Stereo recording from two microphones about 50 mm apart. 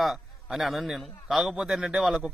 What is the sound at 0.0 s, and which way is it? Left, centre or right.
A man's voice, centre.